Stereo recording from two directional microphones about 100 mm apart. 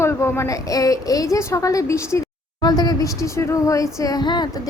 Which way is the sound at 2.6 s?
45° left (ahead or behind).